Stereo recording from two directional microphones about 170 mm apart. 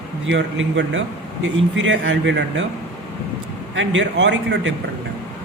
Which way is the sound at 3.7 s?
90° right.